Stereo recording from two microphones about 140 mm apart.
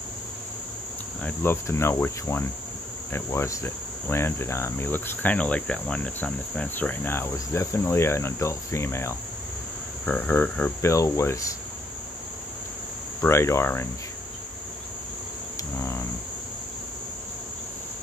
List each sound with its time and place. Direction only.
1.2 s cricket: 15° left (ahead or behind)
13.2 s speech: 20° left (ahead or behind)